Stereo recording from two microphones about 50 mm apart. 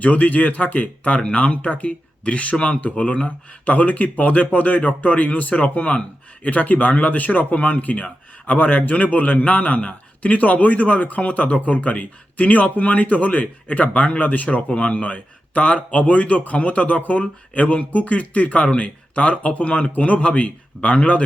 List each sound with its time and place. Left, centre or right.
0.0 s a man's voice: left